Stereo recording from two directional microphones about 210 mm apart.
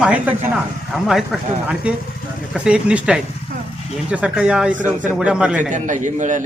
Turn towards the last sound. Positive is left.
turn(degrees=-35)  # may be behind; listen again after turning